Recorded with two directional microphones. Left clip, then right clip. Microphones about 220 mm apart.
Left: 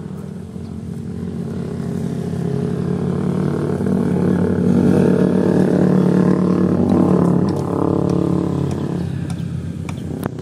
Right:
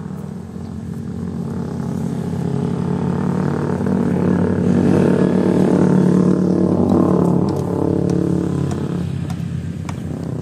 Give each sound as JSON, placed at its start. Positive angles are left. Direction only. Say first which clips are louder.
{"t": 2.7, "sound": "vehicle", "louder": "even", "side_deg": 45}
{"t": 5.5, "sound": "didgeridoo", "louder": "even", "side_deg": 25}
{"t": 7.7, "sound": "a sound", "louder": "left 2 dB", "side_deg": -10}